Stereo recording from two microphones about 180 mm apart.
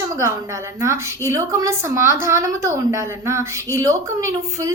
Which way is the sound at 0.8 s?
15° right (ahead or behind).